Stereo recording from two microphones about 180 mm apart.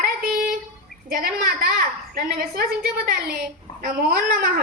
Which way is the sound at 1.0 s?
55° right (ahead or behind).